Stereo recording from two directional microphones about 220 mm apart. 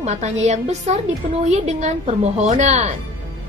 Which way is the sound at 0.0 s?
30° right (ahead or behind).